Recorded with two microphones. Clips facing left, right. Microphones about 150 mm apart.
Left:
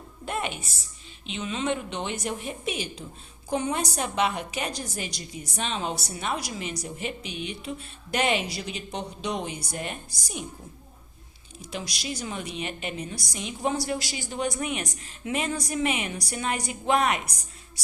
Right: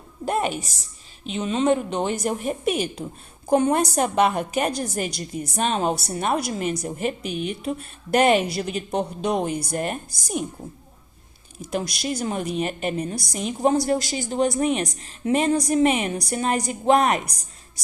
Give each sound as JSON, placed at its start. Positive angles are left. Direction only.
{"t": 0.3, "sound": "a woman's voice", "side_deg": -40}
{"t": 11.7, "sound": "a woman's voice", "side_deg": -50}